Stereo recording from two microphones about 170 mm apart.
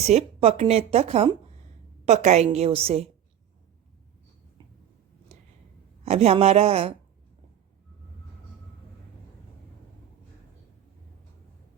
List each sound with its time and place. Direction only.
0.0 s speech: 40° right (ahead or behind)
5.3 s a sound: 40° right (ahead or behind)
6.1 s speech: 35° right (ahead or behind)